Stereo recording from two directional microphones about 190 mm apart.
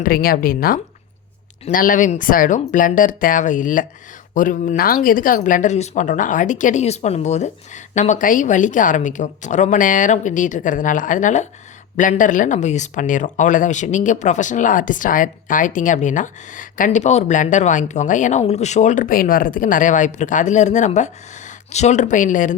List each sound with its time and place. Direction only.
0.0 s speech: 50° left (ahead or behind)